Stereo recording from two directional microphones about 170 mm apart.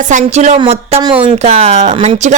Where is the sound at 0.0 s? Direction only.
45° right (ahead or behind).